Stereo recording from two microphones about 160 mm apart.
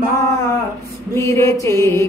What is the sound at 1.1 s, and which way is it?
Music, 20° left (ahead or behind).